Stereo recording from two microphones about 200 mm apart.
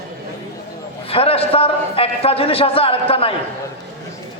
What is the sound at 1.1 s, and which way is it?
A man's voice, 30° left (ahead or behind).